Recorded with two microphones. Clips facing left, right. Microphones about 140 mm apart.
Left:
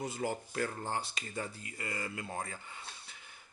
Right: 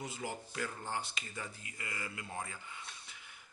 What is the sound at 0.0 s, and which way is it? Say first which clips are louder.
Speech: left 6 dB; 45° left (ahead or behind).